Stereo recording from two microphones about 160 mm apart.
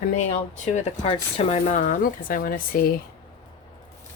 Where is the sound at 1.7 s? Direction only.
60° left (ahead or behind).